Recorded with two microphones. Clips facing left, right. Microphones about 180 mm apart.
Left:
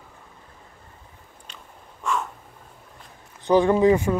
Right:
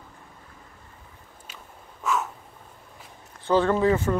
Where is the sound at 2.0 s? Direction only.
Centre (ahead or behind).